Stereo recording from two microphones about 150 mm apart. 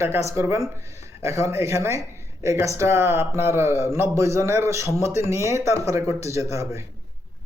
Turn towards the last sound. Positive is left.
turn(degrees=-20)  # may be behind; listen again after turning